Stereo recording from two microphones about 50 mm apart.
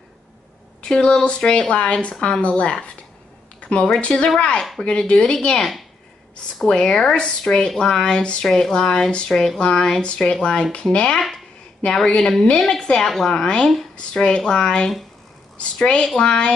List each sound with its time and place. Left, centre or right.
0.8 s a woman's voice: centre
6.7 s a woman's voice: centre
10.0 s a woman's voice: left
10.7 s speech: left
11.1 s a woman's voice: centre
13.9 s a woman's voice: left